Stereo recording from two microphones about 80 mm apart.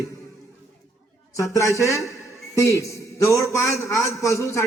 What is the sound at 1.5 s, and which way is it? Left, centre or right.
A man's voice, left.